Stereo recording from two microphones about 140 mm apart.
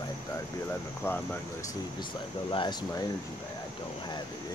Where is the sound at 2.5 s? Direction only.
35° left (ahead or behind).